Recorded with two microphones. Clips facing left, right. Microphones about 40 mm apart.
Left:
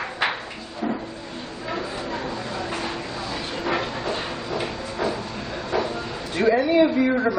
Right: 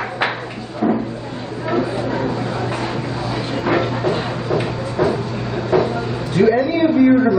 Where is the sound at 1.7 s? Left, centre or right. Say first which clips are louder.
Right 9 dB; centre.